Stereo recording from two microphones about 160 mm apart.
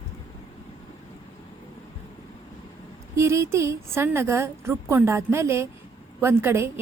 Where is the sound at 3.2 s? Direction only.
15° right (ahead or behind).